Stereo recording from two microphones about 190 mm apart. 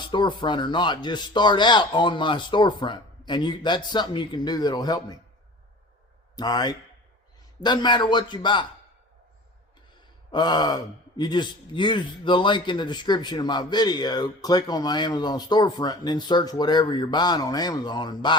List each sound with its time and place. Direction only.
0.0 s speech: 25° left (ahead or behind)
6.3 s speech: 20° left (ahead or behind)
10.3 s speech: 20° left (ahead or behind)